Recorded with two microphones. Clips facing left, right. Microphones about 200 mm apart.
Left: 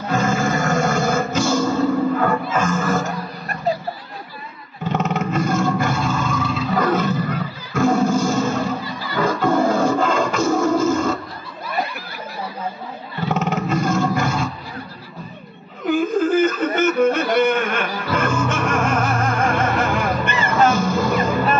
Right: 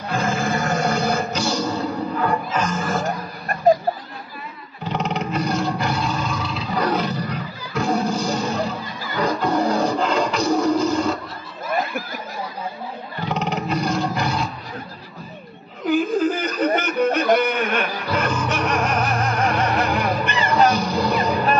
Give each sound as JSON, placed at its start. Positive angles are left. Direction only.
{"t": 0.1, "sound": "music", "side_deg": 50}
{"t": 4.8, "sound": "roar", "side_deg": 50}
{"t": 8.8, "sound": "music", "side_deg": -45}
{"t": 9.2, "sound": "music", "side_deg": 50}
{"t": 11.6, "sound": "snicker", "side_deg": -45}
{"t": 13.2, "sound": "roar", "side_deg": 50}
{"t": 15.9, "sound": "whimper", "side_deg": 50}
{"t": 16.8, "sound": "a sound", "side_deg": 50}
{"t": 17.5, "sound": "music", "side_deg": 50}